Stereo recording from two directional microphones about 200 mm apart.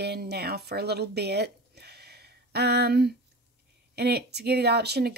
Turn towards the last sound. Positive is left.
turn(degrees=-55)  # may be behind; listen again after turning